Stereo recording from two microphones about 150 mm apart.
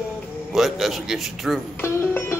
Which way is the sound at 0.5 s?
Centre (ahead or behind).